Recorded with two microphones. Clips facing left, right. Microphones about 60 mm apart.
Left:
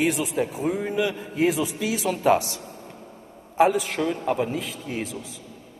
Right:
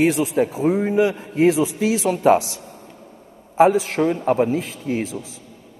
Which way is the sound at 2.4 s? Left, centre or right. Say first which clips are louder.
Even; left.